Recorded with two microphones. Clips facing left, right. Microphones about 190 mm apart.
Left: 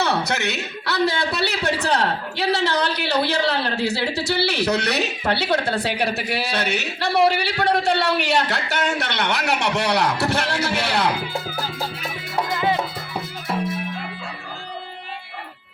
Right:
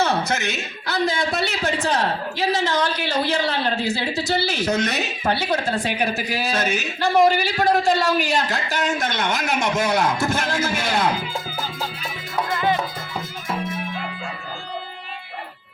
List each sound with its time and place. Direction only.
0.3 s speech: 65° left (ahead or behind)
12.5 s music: 15° left (ahead or behind)